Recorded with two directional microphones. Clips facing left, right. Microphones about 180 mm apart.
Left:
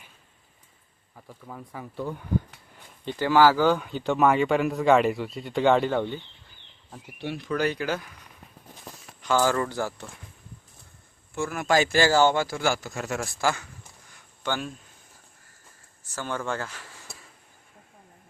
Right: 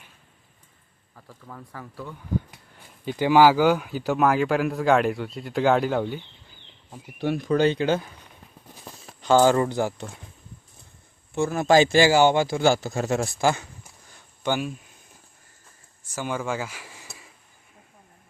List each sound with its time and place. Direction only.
1.1 s speech: 15° left (ahead or behind)
3.0 s speech: 10° right (ahead or behind)
7.2 s speech: 45° right (ahead or behind)
7.5 s speech: 25° right (ahead or behind)
11.3 s speech: 25° right (ahead or behind)
16.1 s speech: 10° right (ahead or behind)